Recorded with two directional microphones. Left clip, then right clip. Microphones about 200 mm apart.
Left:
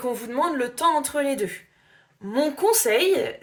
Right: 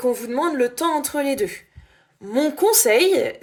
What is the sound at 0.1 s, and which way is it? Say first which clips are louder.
Speech: right 3 dB; 45° right (ahead or behind).